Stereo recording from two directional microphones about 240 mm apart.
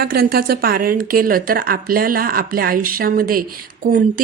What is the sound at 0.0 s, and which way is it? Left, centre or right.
A woman's voice, right.